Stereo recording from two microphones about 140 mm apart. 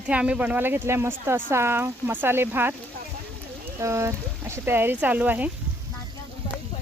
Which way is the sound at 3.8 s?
20° right (ahead or behind).